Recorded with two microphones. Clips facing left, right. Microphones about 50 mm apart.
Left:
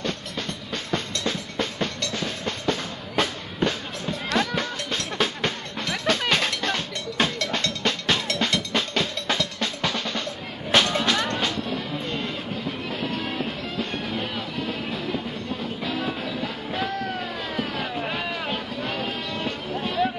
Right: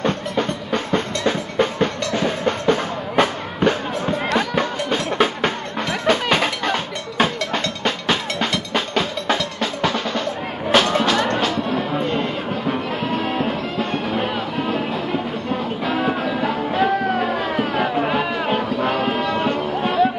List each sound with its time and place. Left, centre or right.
0.0 s music: right
4.4 s music: centre
12.0 s music: centre
15.9 s music: right
17.1 s a sound: right
18.6 s music: right